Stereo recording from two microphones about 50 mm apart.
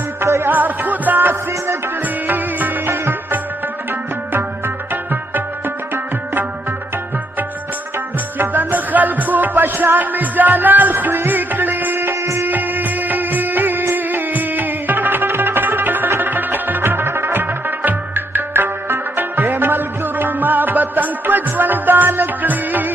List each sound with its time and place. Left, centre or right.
0.5 s music: right
8.4 s music: right
12.4 s music: right